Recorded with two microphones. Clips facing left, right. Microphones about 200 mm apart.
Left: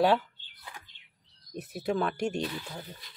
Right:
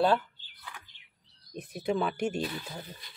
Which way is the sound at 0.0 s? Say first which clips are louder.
Left 1 dB; 10° left (ahead or behind).